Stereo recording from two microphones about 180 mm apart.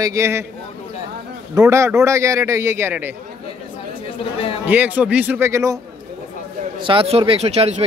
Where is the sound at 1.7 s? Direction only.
15° right (ahead or behind).